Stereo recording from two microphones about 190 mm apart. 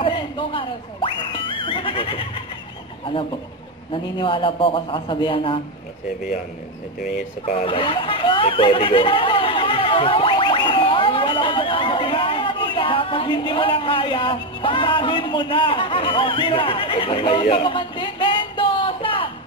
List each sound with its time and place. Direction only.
0.0 s neigh: 25° left (ahead or behind)
3.9 s a man's voice: 25° left (ahead or behind)
7.4 s speech: 25° left (ahead or behind)